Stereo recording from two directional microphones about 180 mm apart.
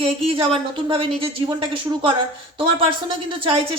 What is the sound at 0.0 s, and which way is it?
A man's voice, 30° right (ahead or behind).